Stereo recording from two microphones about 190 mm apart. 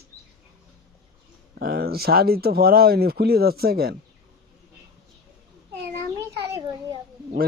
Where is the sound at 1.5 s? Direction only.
55° right (ahead or behind).